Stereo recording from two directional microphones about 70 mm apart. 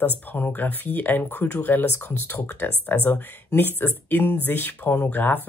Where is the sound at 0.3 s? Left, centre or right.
Left.